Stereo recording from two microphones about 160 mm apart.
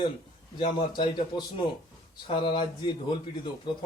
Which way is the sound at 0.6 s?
30° left (ahead or behind).